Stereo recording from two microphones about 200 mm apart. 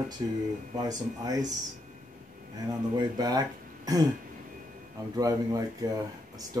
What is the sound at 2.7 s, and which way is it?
Speech, 20° right (ahead or behind).